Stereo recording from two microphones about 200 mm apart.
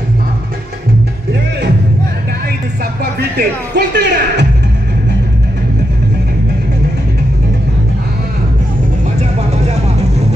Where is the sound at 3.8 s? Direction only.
55° right (ahead or behind).